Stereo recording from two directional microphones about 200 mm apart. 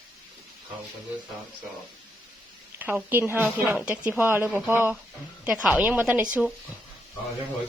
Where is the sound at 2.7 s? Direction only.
10° right (ahead or behind).